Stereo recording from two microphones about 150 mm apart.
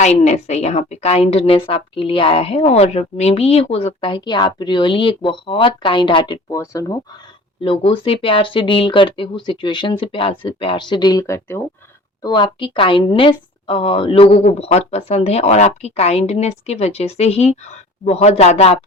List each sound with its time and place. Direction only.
0.0 s a woman's voice: 50° left (ahead or behind); by 6.4 s 35° left (ahead or behind)
6.5 s speech: 20° left (ahead or behind)
7.6 s a woman's voice: 40° left (ahead or behind); by 11.6 s 15° left (ahead or behind)
12.2 s a woman's voice: 30° left (ahead or behind)